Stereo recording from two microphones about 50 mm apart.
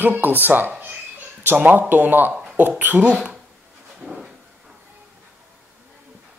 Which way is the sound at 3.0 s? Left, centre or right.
Right.